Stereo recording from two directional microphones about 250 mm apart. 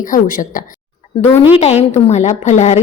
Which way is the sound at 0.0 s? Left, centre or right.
Left.